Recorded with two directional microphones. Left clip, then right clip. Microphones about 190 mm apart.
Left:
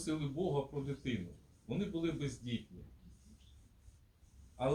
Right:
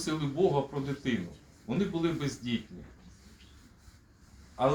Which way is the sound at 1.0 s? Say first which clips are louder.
Right 8 dB; 10° left (ahead or behind).